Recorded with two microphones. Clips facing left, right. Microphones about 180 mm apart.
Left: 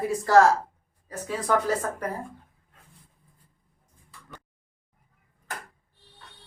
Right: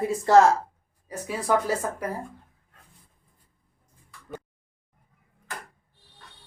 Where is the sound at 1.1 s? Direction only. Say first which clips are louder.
Right 1 dB; 10° right (ahead or behind).